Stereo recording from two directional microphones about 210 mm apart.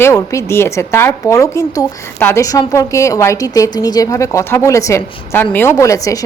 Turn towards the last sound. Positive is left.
turn(degrees=15)  # may be behind; listen again after turning